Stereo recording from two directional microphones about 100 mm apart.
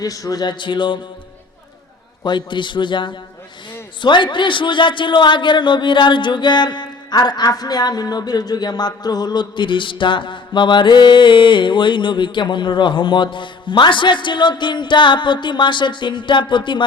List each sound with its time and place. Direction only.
0.0 s a man's voice: 35° left (ahead or behind); by 0.9 s 50° left (ahead or behind)
2.2 s a man's voice: 50° left (ahead or behind)